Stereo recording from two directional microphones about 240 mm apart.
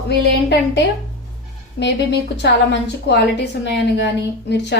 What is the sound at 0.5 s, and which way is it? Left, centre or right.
A woman's voice, left.